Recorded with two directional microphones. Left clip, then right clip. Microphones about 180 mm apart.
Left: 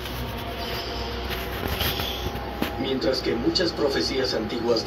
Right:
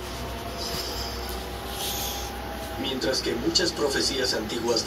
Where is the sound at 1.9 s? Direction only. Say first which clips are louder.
Left 3 dB; 15° right (ahead or behind).